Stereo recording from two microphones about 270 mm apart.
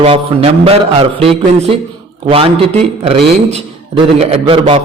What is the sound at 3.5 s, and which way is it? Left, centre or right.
A man's voice, right.